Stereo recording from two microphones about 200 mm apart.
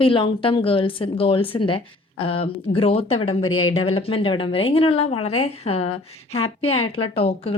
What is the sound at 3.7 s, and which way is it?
A woman's voice, 30° left (ahead or behind).